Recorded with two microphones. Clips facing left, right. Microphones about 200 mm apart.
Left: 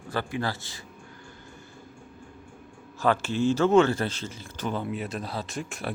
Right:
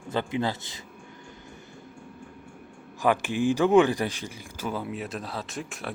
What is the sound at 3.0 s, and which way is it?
Speech, 15° right (ahead or behind).